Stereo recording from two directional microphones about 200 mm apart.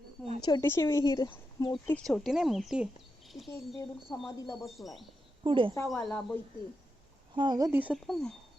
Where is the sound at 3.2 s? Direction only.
Centre (ahead or behind).